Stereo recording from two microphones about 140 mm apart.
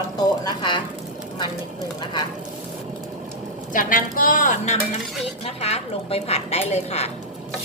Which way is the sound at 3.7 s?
75° left (ahead or behind).